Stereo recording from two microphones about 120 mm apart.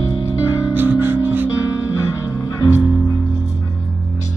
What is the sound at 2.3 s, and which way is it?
Music, 25° left (ahead or behind).